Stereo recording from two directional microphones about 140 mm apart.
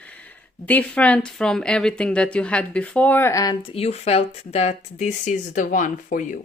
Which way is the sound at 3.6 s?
45° left (ahead or behind).